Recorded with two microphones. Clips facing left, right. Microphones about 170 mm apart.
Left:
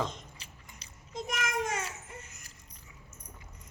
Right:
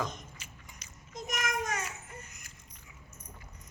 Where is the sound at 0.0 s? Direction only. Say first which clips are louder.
Left 2 dB; 30° left (ahead or behind).